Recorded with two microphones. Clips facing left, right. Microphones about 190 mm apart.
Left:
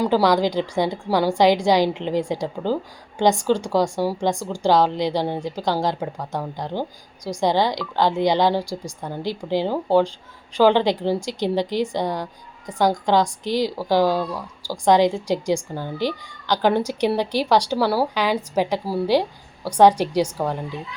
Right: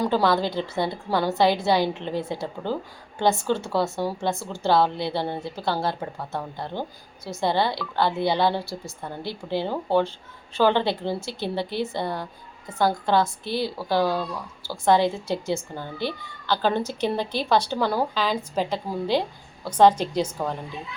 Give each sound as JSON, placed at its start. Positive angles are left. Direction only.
{"t": 0.0, "sound": "a woman's voice", "side_deg": 10}